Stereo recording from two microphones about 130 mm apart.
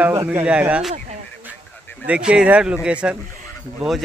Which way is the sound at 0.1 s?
20° right (ahead or behind).